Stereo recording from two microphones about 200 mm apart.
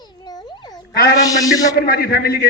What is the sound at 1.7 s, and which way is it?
Speech, 50° left (ahead or behind).